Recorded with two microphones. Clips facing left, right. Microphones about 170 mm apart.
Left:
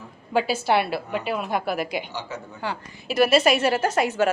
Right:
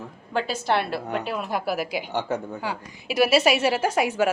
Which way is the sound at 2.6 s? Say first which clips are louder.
Even; 10° right (ahead or behind).